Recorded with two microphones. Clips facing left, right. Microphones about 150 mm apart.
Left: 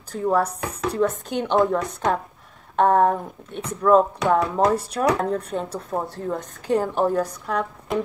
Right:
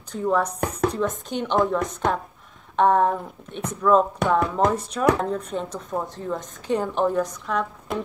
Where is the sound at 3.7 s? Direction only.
10° left (ahead or behind).